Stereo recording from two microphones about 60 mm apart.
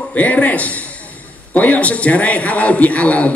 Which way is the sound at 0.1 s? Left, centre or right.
Left.